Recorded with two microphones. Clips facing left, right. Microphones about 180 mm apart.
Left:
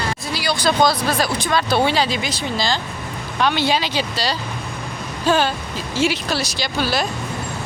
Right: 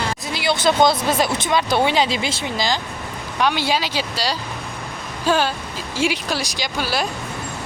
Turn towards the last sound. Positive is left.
turn(degrees=-10)  # may be behind; listen again after turning